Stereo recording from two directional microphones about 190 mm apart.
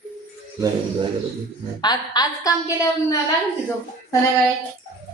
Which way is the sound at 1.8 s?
20° left (ahead or behind).